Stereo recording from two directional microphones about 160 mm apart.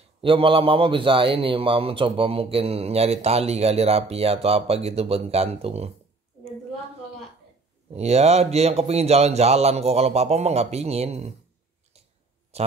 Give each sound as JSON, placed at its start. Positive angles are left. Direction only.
{"t": 0.2, "sound": "a man's voice", "side_deg": -35}
{"t": 7.9, "sound": "a man's voice", "side_deg": -40}
{"t": 12.5, "sound": "a man's voice", "side_deg": -40}